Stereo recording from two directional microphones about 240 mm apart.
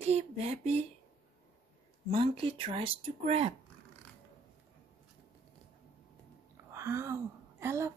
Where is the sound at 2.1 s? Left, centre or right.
Right.